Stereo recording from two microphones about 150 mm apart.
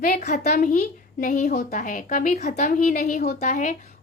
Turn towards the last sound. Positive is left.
turn(degrees=55)  # may be behind; listen again after turning